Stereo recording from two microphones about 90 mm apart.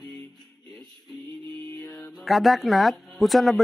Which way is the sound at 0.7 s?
5° left (ahead or behind).